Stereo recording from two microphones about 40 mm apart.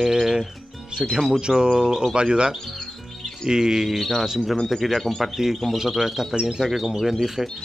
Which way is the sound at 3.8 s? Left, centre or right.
Centre.